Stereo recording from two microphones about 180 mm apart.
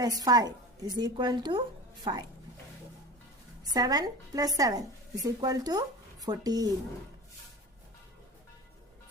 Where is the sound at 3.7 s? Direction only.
20° right (ahead or behind).